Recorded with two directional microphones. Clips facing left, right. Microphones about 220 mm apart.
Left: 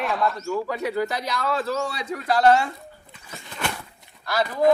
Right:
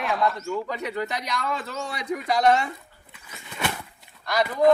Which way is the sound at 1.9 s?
15° right (ahead or behind).